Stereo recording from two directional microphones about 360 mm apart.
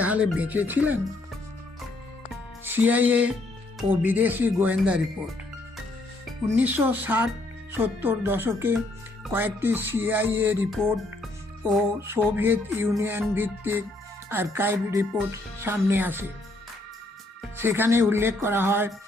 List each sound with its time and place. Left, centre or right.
0.0 s speech: centre
2.3 s music: centre
3.8 s speech: centre
6.6 s speech: centre
17.6 s speech: centre